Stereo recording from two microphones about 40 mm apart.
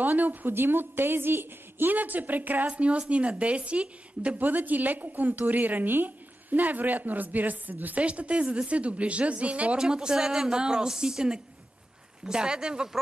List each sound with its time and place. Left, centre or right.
0.0 s speech: right
0.5 s a woman's voice: right
2.7 s speech: right
4.4 s a woman's voice: right
8.0 s speech: right
9.8 s speech: centre